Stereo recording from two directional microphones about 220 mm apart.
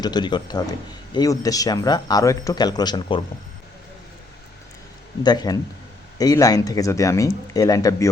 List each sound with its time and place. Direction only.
0.0 s speech: 20° left (ahead or behind)
5.2 s speech: 20° left (ahead or behind)